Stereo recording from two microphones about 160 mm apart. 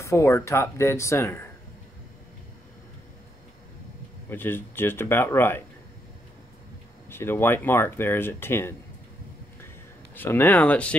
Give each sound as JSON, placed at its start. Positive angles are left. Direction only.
{"t": 0.0, "sound": "speech", "side_deg": 20}
{"t": 4.3, "sound": "speech", "side_deg": 15}
{"t": 7.1, "sound": "speech", "side_deg": 15}
{"t": 10.1, "sound": "speech", "side_deg": 15}